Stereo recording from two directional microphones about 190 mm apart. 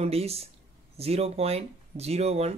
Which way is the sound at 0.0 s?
30° right (ahead or behind).